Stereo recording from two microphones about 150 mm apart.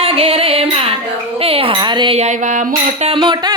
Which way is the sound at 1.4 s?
40° right (ahead or behind).